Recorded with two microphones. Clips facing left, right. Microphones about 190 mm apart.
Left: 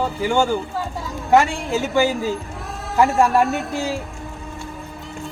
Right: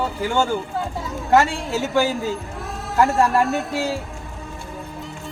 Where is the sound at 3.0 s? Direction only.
Centre (ahead or behind).